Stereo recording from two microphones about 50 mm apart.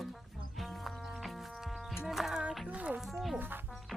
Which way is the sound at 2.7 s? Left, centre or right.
Right.